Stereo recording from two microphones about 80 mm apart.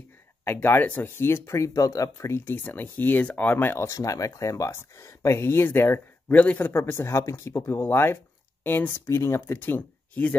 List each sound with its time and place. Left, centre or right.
0.5 s speech: left